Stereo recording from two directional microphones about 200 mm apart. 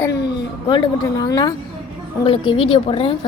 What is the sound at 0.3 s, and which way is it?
A woman's voice, 25° left (ahead or behind).